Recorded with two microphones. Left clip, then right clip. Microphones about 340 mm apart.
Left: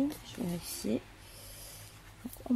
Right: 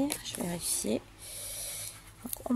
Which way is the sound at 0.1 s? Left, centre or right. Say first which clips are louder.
Right 4 dB; right.